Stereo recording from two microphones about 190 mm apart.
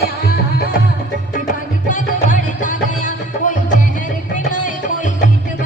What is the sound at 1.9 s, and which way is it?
Music, 45° left (ahead or behind).